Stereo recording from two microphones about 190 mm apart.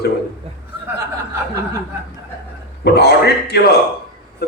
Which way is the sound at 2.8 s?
60° left (ahead or behind).